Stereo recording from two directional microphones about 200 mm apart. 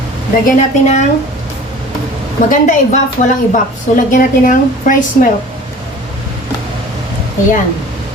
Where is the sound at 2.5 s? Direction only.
40° left (ahead or behind).